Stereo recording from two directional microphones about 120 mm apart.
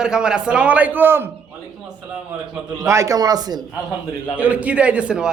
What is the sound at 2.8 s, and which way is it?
Speech, 25° right (ahead or behind).